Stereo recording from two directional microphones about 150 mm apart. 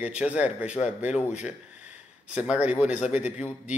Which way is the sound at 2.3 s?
5° right (ahead or behind).